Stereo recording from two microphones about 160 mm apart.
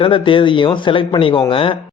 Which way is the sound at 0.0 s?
30° left (ahead or behind).